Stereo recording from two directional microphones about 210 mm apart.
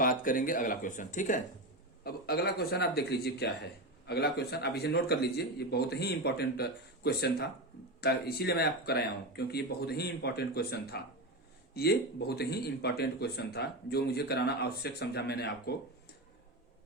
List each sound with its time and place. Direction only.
0.0 s speech: 40° left (ahead or behind)